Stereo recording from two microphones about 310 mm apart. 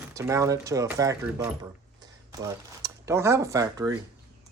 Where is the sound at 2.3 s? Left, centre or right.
Centre.